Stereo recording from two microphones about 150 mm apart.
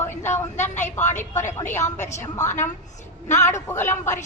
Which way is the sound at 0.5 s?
50° left (ahead or behind).